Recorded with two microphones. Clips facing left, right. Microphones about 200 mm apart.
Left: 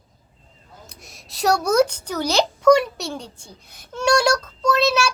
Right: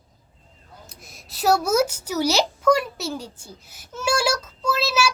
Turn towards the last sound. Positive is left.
turn(degrees=-5)  # may be behind; listen again after turning